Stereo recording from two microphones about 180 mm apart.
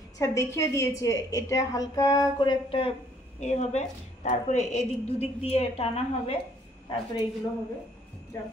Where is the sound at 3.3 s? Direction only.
40° left (ahead or behind).